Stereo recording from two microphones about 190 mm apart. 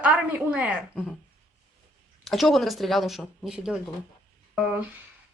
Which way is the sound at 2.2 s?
Centre (ahead or behind).